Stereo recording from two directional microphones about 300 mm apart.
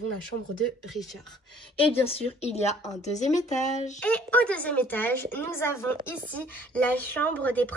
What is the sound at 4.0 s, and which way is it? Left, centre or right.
A woman's voice, centre.